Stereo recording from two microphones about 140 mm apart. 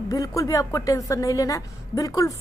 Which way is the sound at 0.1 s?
25° left (ahead or behind).